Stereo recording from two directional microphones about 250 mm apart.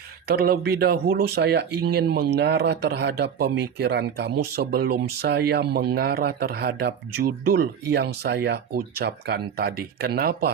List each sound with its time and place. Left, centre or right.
0.3 s speech: right